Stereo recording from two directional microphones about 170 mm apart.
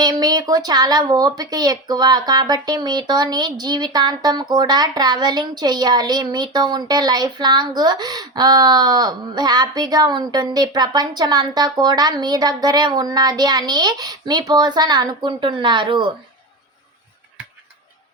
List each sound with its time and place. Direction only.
0.0 s speech: 20° right (ahead or behind)